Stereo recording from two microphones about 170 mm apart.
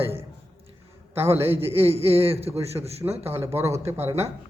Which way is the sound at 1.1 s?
15° right (ahead or behind).